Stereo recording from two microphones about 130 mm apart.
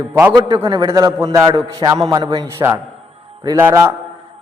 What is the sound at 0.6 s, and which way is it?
Speech, 35° right (ahead or behind).